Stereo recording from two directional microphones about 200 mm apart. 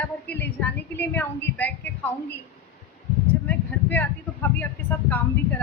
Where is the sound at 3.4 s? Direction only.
10° left (ahead or behind).